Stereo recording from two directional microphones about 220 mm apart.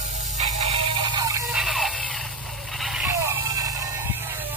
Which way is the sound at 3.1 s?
10° right (ahead or behind).